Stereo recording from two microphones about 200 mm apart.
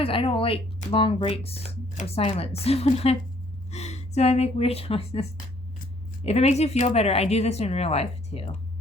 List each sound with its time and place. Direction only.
0.0 s speech: 25° left (ahead or behind)
6.2 s speech: 35° left (ahead or behind)